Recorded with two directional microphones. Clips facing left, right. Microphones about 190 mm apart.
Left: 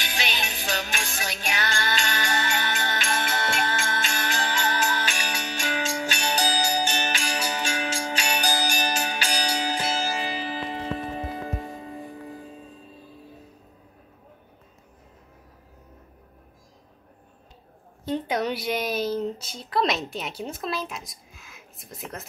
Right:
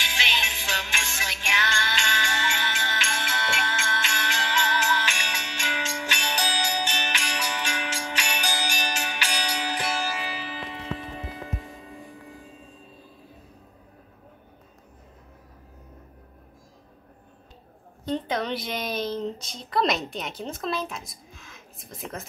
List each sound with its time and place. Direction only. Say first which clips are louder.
0.0 s music: left 2 dB; 40° left (ahead or behind)
18.0 s speech: left 2 dB; 10° left (ahead or behind)